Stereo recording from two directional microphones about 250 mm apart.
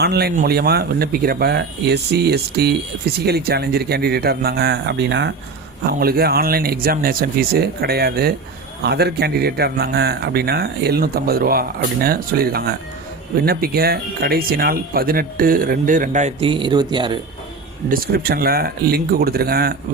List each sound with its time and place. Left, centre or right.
0.0 s speech: right; by 17.2 s centre
17.8 s speech: right